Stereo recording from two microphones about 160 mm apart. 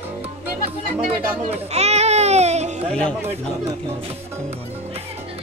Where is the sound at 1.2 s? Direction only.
10° right (ahead or behind).